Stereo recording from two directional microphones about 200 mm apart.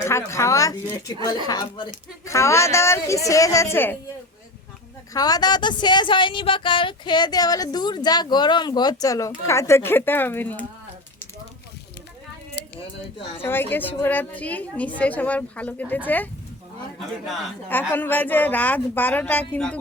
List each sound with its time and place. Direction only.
0.3 s a woman's voice: 15° left (ahead or behind)
5.1 s speech: 20° left (ahead or behind)
12.6 s a sound: 55° left (ahead or behind)
13.4 s a woman's voice: 10° left (ahead or behind)
17.9 s a woman's voice: 10° left (ahead or behind)